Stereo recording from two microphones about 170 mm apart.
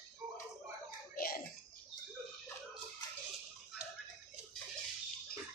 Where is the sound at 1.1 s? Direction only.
60° left (ahead or behind).